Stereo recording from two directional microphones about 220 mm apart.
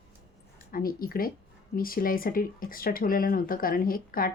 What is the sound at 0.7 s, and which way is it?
Speech, 40° left (ahead or behind).